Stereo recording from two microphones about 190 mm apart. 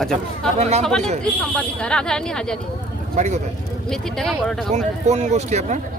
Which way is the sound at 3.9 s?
5° left (ahead or behind).